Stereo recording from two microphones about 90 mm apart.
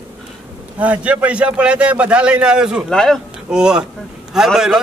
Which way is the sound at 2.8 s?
5° left (ahead or behind).